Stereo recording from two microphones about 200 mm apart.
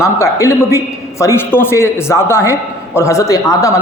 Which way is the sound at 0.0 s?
15° left (ahead or behind).